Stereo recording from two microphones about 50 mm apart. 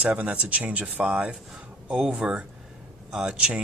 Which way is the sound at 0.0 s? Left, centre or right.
Right.